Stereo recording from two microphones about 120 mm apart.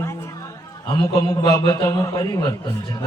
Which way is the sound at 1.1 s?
40° left (ahead or behind).